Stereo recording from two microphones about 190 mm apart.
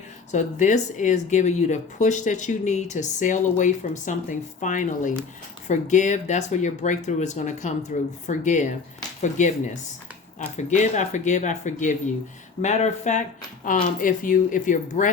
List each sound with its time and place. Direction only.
0.3 s speech: 40° left (ahead or behind)
10.6 s speech: 40° left (ahead or behind)